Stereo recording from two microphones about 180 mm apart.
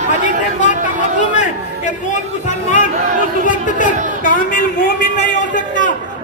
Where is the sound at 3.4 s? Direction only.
45° left (ahead or behind).